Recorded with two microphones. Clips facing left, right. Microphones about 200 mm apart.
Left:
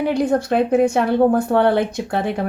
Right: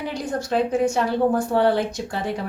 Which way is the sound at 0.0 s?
60° left (ahead or behind).